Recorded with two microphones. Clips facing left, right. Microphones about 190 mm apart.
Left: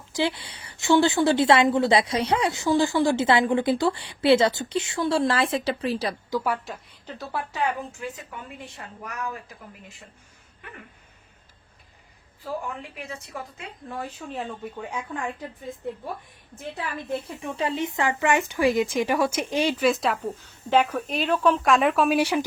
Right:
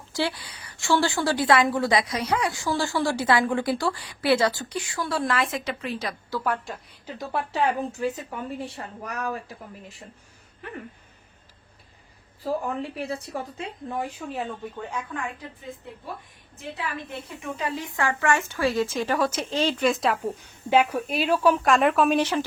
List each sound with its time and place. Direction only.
0.1 s a woman's voice: 20° left (ahead or behind)
6.3 s speech: 10° left (ahead or behind)
7.3 s a woman's voice: 35° right (ahead or behind)
12.5 s a woman's voice: 35° right (ahead or behind)
13.8 s a woman's voice: 15° right (ahead or behind)
17.4 s speech: 25° left (ahead or behind); by 20.1 s centre (ahead or behind)
20.2 s a woman's voice: 10° right (ahead or behind)
22.2 s speech: 10° left (ahead or behind)